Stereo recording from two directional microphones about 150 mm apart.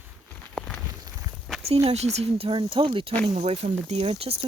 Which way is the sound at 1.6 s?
40° right (ahead or behind).